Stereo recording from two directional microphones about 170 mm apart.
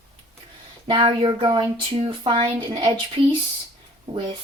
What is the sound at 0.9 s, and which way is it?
Speech, 30° right (ahead or behind).